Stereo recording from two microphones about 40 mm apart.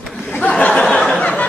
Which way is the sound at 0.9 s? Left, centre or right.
Centre.